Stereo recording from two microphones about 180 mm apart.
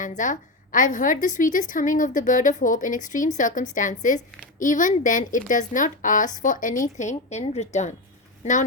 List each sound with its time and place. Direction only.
0.0 s a woman's voice: 45° left (ahead or behind)